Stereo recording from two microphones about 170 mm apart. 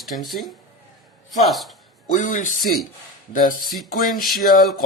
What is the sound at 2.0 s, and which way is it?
A man's voice, 50° left (ahead or behind).